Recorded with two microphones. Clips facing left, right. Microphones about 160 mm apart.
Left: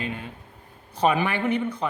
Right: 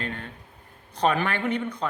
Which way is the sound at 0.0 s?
10° left (ahead or behind).